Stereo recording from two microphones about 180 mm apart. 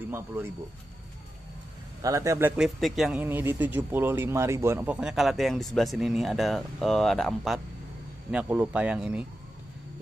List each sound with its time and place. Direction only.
2.0 s speech: 20° right (ahead or behind)